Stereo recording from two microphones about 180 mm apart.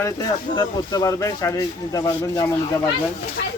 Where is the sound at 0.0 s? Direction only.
20° left (ahead or behind).